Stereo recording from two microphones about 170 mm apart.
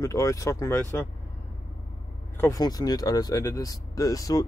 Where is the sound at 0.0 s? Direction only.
20° left (ahead or behind).